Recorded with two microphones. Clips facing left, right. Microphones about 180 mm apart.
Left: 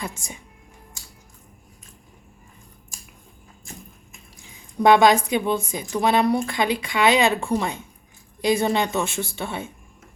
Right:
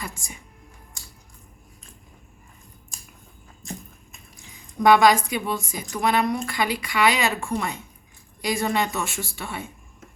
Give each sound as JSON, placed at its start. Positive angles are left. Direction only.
{"t": 4.8, "sound": "a woman's voice", "side_deg": 25}